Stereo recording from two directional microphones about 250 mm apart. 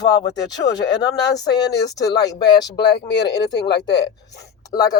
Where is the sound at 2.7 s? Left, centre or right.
Left.